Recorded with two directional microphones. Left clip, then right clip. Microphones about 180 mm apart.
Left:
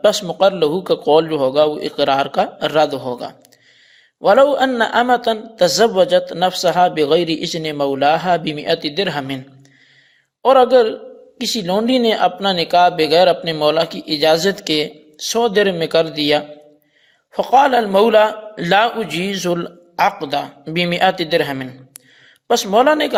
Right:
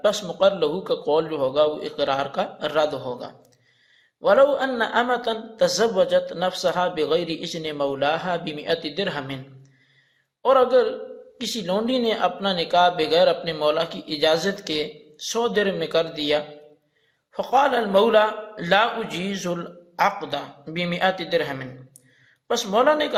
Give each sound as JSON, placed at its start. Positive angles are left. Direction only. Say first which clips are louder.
{"t": 0.0, "sound": "a man's voice", "louder": "left 6 dB", "side_deg": 50}
{"t": 10.4, "sound": "a man's voice", "louder": "left 6 dB", "side_deg": 45}